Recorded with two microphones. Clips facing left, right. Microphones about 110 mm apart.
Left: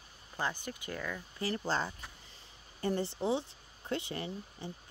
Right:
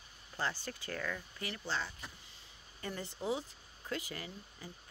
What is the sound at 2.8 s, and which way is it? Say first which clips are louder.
Speech: left 8 dB; 30° left (ahead or behind).